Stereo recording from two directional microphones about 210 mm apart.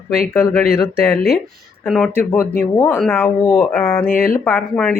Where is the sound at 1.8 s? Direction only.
Centre (ahead or behind).